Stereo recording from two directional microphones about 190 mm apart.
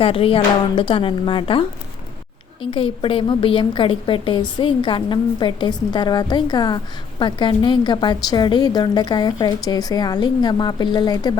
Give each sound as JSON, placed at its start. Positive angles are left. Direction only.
{"t": 0.0, "sound": "a woman's voice", "side_deg": 30}